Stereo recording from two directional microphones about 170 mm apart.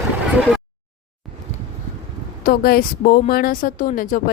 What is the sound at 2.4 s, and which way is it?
A woman's voice, 60° left (ahead or behind).